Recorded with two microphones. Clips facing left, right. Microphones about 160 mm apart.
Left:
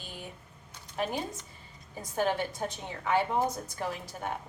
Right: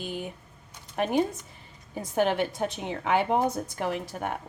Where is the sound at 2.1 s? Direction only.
65° right (ahead or behind).